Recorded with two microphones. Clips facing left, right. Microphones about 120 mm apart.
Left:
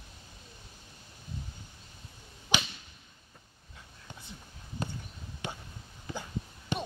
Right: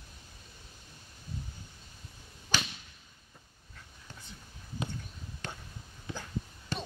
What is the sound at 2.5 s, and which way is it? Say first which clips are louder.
Whip: left 2 dB; 15° left (ahead or behind).